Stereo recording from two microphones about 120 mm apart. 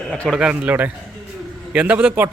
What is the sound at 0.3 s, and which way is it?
A man's voice, 10° right (ahead or behind).